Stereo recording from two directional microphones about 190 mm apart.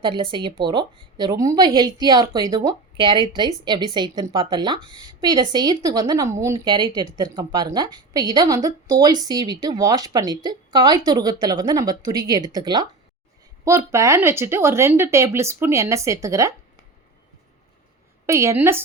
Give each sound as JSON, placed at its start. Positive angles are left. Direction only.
{"t": 0.0, "sound": "a woman's voice", "side_deg": -25}
{"t": 18.3, "sound": "speech", "side_deg": -15}